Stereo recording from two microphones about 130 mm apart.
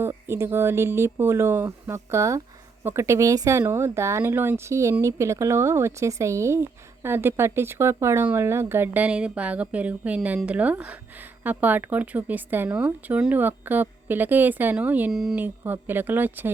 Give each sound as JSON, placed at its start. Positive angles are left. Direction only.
{"t": 0.0, "sound": "speech", "side_deg": -20}
{"t": 15.4, "sound": "speech", "side_deg": -15}